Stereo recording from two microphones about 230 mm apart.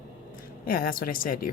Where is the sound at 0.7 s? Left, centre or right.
Left.